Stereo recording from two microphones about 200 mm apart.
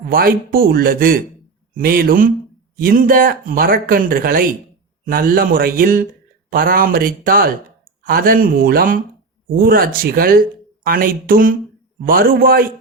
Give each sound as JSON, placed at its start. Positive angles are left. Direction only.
{"t": 0.0, "sound": "speech", "side_deg": -45}